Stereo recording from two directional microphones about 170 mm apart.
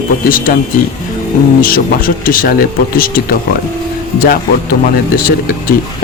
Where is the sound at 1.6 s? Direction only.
55° left (ahead or behind).